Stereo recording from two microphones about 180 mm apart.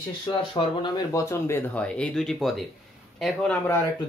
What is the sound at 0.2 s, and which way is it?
Speech, 30° left (ahead or behind).